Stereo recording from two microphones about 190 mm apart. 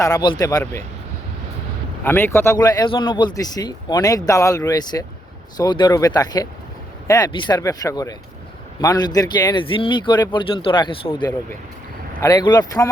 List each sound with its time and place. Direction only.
0.0 s speech: 20° left (ahead or behind)
2.0 s speech: 10° left (ahead or behind)